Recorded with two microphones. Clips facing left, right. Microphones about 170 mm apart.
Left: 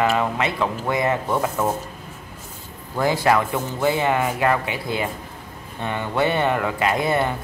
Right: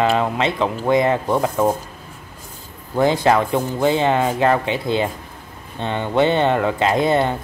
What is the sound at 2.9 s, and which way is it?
Speech, 20° right (ahead or behind).